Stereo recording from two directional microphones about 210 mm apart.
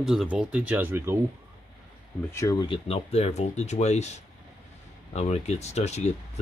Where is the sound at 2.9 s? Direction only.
30° left (ahead or behind).